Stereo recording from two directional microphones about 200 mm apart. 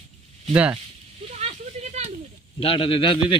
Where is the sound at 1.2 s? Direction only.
35° right (ahead or behind).